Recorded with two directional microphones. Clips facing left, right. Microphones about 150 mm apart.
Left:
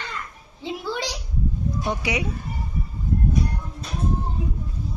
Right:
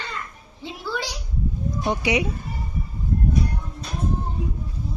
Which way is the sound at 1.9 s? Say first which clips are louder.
Right 5 dB; 20° right (ahead or behind).